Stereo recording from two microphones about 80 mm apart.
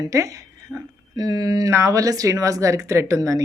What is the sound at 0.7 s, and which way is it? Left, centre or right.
Speech, centre.